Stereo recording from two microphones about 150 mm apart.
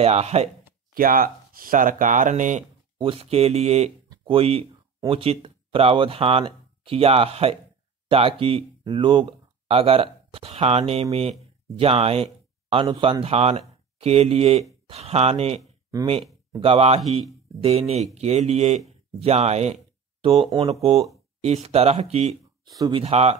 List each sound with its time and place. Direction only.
0.0 s speech: 45° right (ahead or behind)
0.9 s speech: 75° right (ahead or behind); by 2.6 s 55° right (ahead or behind)
3.0 s speech: 40° right (ahead or behind)
22.8 s speech: 30° right (ahead or behind)
23.0 s speech: 45° right (ahead or behind)